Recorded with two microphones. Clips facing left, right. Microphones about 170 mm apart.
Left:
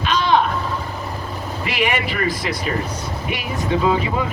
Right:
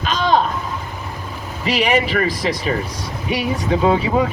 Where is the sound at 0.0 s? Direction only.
45° right (ahead or behind).